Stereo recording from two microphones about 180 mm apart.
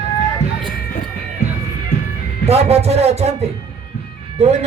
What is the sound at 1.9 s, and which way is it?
Music, 35° left (ahead or behind).